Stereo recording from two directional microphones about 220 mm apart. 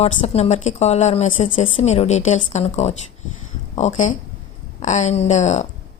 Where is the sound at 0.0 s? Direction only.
30° left (ahead or behind).